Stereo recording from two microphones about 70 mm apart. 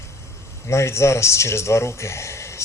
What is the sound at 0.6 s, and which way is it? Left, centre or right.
Speech, left.